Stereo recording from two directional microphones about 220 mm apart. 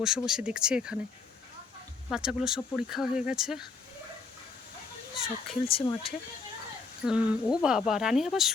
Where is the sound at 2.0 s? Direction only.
5° right (ahead or behind).